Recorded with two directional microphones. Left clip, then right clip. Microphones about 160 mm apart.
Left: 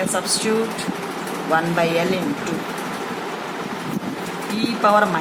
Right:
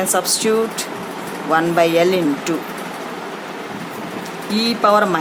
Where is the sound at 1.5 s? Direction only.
60° right (ahead or behind).